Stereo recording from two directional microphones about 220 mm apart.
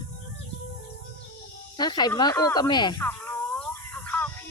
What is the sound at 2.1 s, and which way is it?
Snake, 15° left (ahead or behind).